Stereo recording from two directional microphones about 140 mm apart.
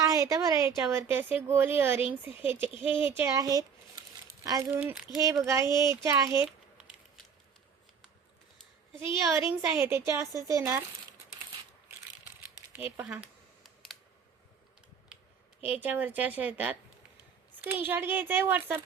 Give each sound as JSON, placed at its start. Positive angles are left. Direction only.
{"t": 0.0, "sound": "a woman's voice", "side_deg": -25}
{"t": 9.1, "sound": "speech", "side_deg": -20}
{"t": 12.7, "sound": "typing", "side_deg": -15}
{"t": 15.6, "sound": "a woman's voice", "side_deg": -10}